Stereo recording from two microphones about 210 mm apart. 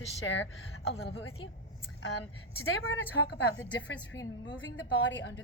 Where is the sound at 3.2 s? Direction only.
60° left (ahead or behind).